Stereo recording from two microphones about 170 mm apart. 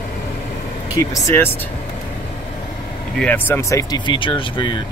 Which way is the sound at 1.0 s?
20° left (ahead or behind).